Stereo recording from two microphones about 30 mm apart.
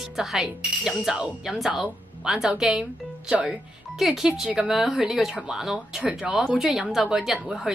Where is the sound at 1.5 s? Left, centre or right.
Centre.